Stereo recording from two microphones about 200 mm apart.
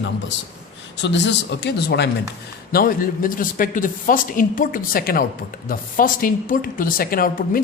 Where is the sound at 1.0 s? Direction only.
60° left (ahead or behind).